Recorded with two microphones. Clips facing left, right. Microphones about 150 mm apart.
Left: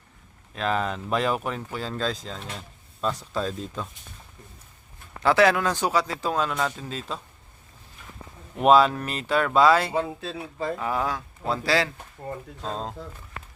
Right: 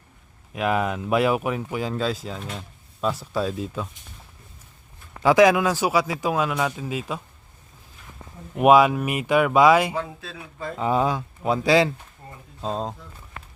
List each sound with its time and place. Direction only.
0.5 s speech: 10° right (ahead or behind)
5.2 s speech: 10° right (ahead or behind)
8.5 s speech: 10° right (ahead or behind)
9.9 s speech: 30° left (ahead or behind)
10.8 s speech: 20° right (ahead or behind)
12.2 s speech: 40° left (ahead or behind)
12.6 s speech: 15° right (ahead or behind)